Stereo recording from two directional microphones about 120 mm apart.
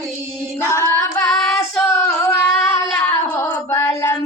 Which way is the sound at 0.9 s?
20° left (ahead or behind).